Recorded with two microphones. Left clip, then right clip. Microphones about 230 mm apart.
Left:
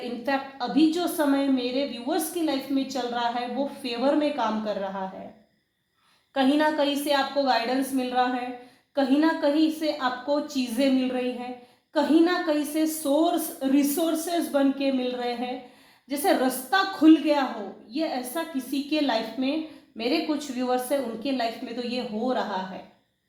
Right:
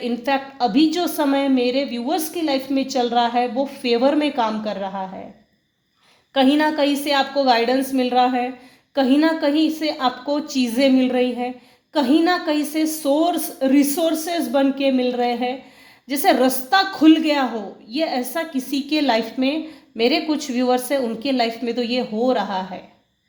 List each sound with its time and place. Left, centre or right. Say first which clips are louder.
0.2 s a woman's voice: right 7 dB; right
6.3 s a woman's voice: right 5 dB; right